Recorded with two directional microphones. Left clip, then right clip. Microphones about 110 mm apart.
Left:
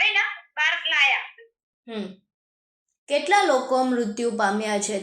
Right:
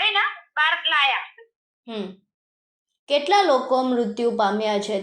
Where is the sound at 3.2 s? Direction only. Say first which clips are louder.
Right 1 dB; 25° right (ahead or behind).